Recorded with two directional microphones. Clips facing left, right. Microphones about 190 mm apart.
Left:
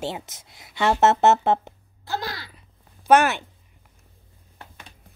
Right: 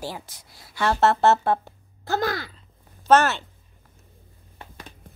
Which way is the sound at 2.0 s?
50° right (ahead or behind).